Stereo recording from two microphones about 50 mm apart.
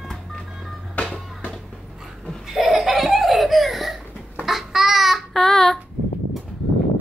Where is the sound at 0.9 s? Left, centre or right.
Left.